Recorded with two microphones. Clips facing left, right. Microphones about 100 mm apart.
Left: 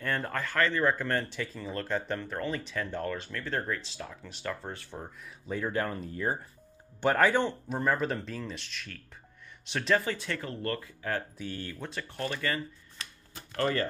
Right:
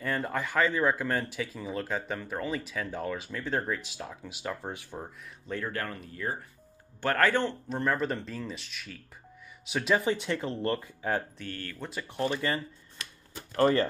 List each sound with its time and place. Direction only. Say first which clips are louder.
0.0 s a sound: right 1 dB; 5° right (ahead or behind)
0.4 s speech: right 1 dB; 15° right (ahead or behind)
5.5 s speech: left 3 dB; 15° left (ahead or behind)
7.0 s speech: left 1 dB; 15° left (ahead or behind); by 11.2 s 20° right (ahead or behind)
11.3 s speech: left 1 dB; 15° left (ahead or behind)
11.8 s speech: right 1 dB; 5° right (ahead or behind)
12.1 s speech: right 4 dB; 20° right (ahead or behind)